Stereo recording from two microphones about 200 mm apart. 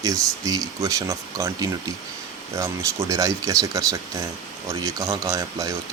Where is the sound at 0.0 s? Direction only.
15° right (ahead or behind).